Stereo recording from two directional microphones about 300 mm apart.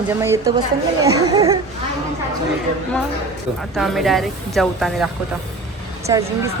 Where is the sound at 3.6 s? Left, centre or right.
Centre.